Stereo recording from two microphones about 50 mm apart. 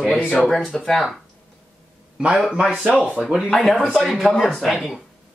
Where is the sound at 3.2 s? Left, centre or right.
Centre.